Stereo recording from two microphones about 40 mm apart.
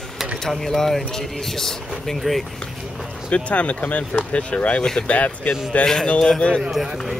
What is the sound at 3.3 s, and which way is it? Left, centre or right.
Speech, left.